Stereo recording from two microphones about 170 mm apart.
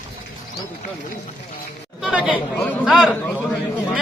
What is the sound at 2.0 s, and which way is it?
Chatter, 5° right (ahead or behind).